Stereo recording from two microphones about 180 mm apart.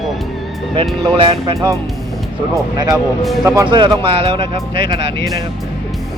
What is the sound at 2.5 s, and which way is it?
Speech, 20° right (ahead or behind).